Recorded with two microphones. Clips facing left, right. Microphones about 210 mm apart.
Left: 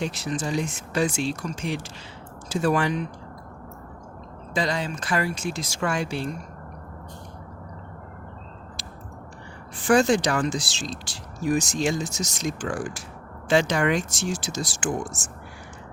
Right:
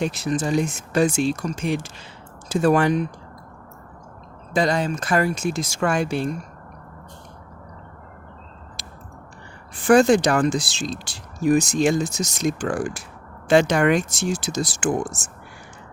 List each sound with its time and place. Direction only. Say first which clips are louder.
0.0 s speech: right 5 dB; 50° right (ahead or behind)
4.5 s speech: right 6 dB; 45° right (ahead or behind)
9.8 s speech: right 5 dB; 55° right (ahead or behind)